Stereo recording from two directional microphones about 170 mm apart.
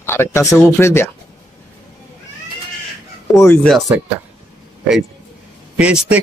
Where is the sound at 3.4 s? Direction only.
15° left (ahead or behind).